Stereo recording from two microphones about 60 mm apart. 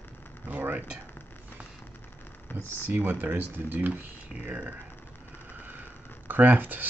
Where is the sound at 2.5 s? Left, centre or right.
Left.